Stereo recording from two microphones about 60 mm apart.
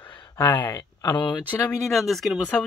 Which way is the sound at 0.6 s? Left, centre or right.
Left.